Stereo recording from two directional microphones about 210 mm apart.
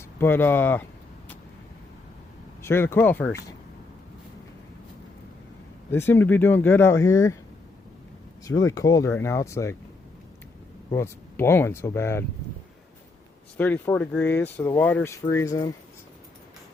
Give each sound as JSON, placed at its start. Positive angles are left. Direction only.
{"t": 0.2, "sound": "speech", "side_deg": 10}
{"t": 2.6, "sound": "speech", "side_deg": 10}
{"t": 5.9, "sound": "speech", "side_deg": 10}
{"t": 8.4, "sound": "speech", "side_deg": 15}
{"t": 10.9, "sound": "speech", "side_deg": 10}
{"t": 13.6, "sound": "speech", "side_deg": 10}